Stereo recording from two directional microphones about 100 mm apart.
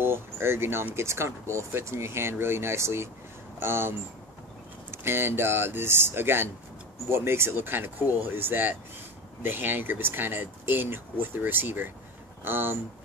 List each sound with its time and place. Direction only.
0.0 s speech: 25° right (ahead or behind)
4.9 s speech: 25° right (ahead or behind)